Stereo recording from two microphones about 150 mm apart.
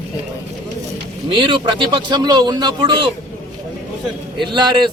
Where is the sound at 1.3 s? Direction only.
30° right (ahead or behind).